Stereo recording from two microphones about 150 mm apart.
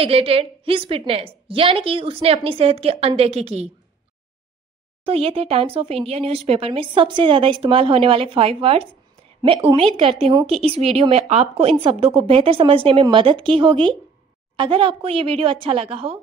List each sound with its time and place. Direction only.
0.0 s speech: 40° right (ahead or behind)
5.0 s speech: 40° right (ahead or behind)